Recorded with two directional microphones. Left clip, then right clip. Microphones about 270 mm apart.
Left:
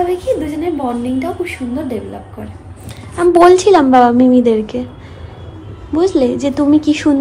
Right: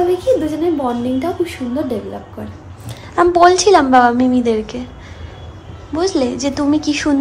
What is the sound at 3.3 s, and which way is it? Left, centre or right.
A woman's voice, centre.